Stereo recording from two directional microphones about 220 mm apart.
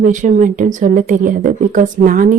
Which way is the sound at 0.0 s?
35° right (ahead or behind).